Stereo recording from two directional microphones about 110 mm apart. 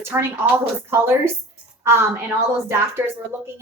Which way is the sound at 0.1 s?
20° right (ahead or behind).